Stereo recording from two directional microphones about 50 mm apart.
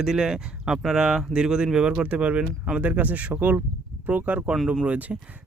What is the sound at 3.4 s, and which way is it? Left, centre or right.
Speech, right.